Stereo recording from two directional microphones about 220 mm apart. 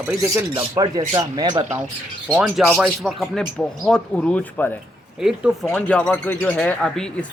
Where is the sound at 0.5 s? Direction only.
20° right (ahead or behind).